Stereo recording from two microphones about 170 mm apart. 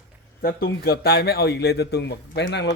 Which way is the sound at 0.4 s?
65° left (ahead or behind).